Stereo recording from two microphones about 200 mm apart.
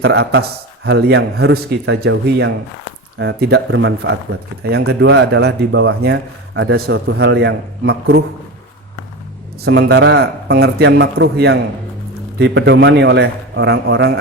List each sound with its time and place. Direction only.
0.0 s speech: 60° right (ahead or behind)
9.6 s speech: 60° right (ahead or behind)